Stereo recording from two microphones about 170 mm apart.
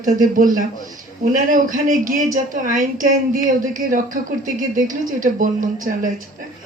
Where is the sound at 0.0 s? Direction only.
55° right (ahead or behind).